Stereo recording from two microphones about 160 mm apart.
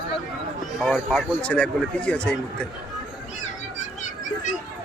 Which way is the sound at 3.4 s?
50° left (ahead or behind).